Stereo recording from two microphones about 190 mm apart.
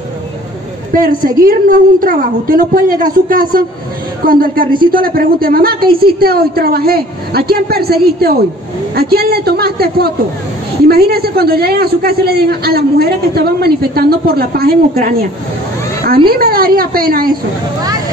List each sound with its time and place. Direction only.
0.9 s a woman's voice: 50° right (ahead or behind)
16.3 s a woman's voice: 50° right (ahead or behind)